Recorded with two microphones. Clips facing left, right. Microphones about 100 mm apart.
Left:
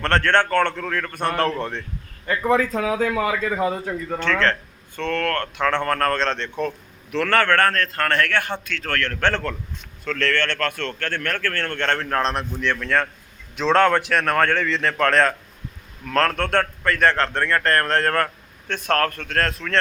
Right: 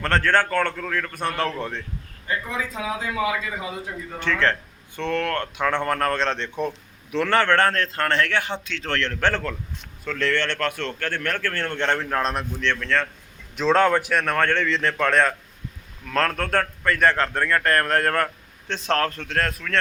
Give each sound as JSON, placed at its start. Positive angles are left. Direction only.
{"t": 0.0, "sound": "speech", "side_deg": -5}
{"t": 2.2, "sound": "speech", "side_deg": 60}
{"t": 4.2, "sound": "a man's voice", "side_deg": -15}
{"t": 12.5, "sound": "a man's voice", "side_deg": 5}
{"t": 13.6, "sound": "speech", "side_deg": -5}
{"t": 18.9, "sound": "speech", "side_deg": -20}